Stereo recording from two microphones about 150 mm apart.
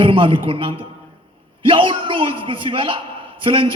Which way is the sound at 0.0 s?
35° right (ahead or behind).